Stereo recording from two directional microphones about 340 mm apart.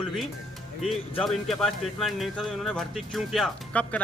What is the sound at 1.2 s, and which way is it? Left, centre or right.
Speech, centre.